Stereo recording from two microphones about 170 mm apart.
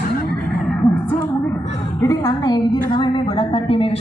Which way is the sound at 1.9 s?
20° left (ahead or behind).